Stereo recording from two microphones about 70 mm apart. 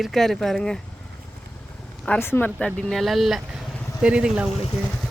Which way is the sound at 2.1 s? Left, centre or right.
Left.